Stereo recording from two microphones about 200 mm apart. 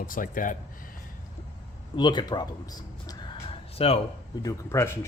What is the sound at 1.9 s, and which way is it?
Speech, 20° left (ahead or behind).